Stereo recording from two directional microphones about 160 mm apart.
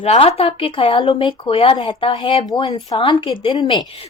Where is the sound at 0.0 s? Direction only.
40° left (ahead or behind).